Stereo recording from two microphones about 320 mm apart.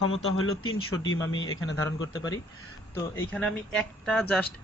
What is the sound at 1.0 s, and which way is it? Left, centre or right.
Speech, left.